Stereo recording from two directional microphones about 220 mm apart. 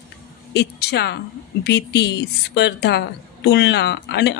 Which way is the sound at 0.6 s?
50° left (ahead or behind).